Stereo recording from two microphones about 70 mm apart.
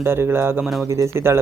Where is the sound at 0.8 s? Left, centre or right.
Right.